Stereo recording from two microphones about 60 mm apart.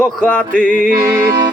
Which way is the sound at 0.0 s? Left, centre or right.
Left.